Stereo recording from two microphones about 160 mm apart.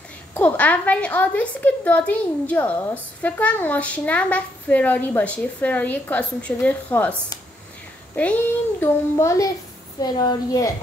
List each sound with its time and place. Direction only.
0.3 s a woman's voice: 10° left (ahead or behind)
8.2 s a woman's voice: 10° left (ahead or behind)